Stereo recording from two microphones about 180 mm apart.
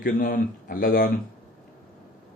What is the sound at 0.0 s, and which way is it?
Speech, 50° left (ahead or behind).